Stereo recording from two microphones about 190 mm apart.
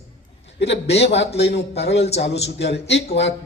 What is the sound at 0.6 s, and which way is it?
A man's voice, 65° left (ahead or behind).